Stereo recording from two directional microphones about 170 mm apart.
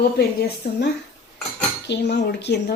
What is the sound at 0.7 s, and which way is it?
Speech, 70° left (ahead or behind).